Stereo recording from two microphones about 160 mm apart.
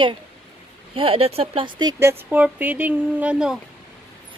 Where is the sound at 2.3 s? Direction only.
10° right (ahead or behind).